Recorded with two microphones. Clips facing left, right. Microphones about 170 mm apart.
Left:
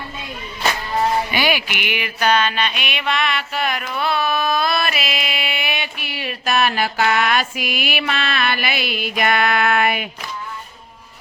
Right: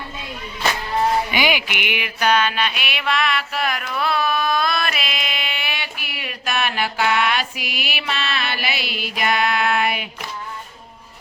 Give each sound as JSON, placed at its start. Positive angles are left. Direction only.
{"t": 1.3, "sound": "music", "side_deg": -15}